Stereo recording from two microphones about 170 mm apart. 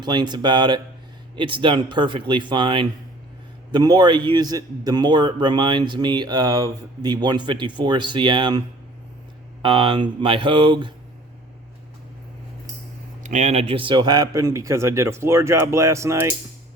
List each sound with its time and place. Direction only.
0.0 s a man's voice: 25° right (ahead or behind)
13.2 s a man's voice: 45° right (ahead or behind); by 16.2 s 15° right (ahead or behind)